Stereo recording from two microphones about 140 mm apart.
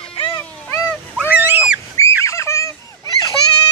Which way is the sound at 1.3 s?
10° right (ahead or behind).